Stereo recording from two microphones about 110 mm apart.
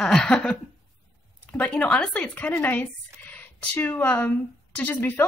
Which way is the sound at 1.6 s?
10° left (ahead or behind).